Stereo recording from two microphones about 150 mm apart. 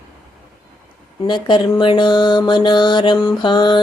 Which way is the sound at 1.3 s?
30° left (ahead or behind).